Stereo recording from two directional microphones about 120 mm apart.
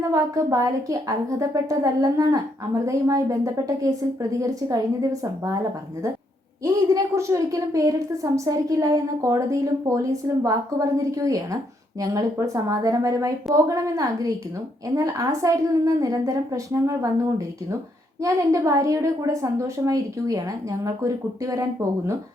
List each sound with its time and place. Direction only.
0.1 s a woman's voice: 30° right (ahead or behind)
6.7 s a woman's voice: 30° right (ahead or behind)